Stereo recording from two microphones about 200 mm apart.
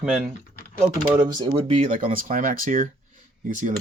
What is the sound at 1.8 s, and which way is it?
Speech, 40° right (ahead or behind).